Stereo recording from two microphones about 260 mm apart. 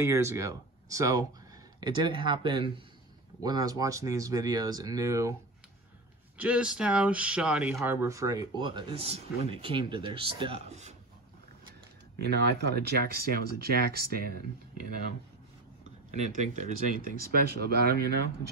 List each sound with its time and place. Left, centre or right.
0.0 s speech: centre
6.3 s speech: centre; by 11.0 s right
12.3 s speech: right
16.1 s speech: right